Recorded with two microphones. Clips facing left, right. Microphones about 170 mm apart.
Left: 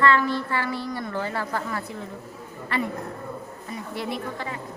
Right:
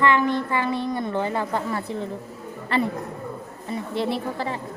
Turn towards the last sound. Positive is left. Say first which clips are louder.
# right 4 dB
turn(degrees=-30)  # may be behind; listen again after turning